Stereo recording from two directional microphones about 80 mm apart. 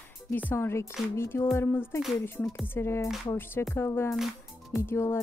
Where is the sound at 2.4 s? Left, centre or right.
Centre.